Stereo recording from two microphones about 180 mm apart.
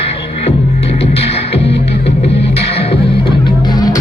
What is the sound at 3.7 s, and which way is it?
Music, 20° left (ahead or behind).